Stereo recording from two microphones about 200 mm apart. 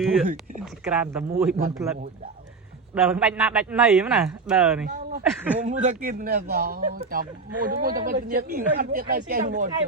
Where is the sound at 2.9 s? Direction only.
5° right (ahead or behind).